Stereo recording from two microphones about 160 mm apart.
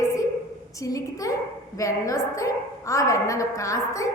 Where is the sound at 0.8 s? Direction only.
20° left (ahead or behind).